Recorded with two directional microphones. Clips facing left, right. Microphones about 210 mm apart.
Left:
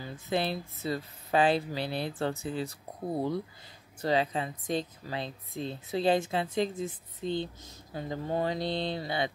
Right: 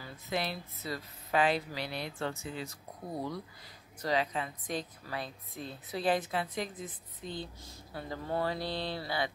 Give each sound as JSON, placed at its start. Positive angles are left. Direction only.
{"t": 0.0, "sound": "a woman's voice", "side_deg": 30}